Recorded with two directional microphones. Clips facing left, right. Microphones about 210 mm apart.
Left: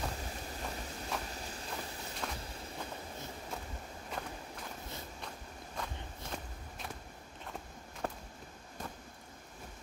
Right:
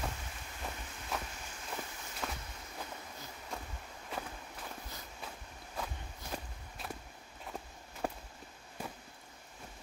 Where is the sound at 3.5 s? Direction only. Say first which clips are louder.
Right 1 dB; centre (ahead or behind).